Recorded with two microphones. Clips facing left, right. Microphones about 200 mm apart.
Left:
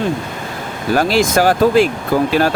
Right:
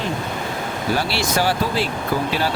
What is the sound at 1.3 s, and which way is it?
Speech, 50° left (ahead or behind).